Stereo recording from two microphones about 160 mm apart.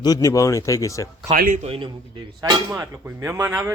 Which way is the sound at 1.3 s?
55° right (ahead or behind).